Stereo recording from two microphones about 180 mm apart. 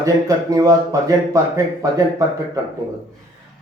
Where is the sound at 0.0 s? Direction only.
20° right (ahead or behind).